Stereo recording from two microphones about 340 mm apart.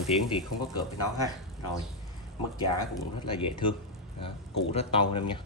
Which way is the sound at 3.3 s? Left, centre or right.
Centre.